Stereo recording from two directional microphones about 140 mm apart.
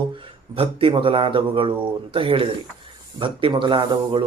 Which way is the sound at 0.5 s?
40° right (ahead or behind).